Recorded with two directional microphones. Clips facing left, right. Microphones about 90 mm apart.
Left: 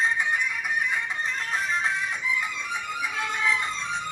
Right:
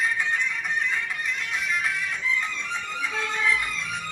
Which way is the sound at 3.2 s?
20° left (ahead or behind).